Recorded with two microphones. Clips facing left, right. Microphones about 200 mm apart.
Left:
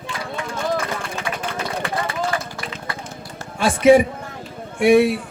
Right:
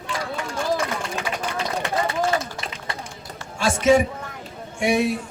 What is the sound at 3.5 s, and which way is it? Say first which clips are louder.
A man's voice: left 4 dB; 55° left (ahead or behind).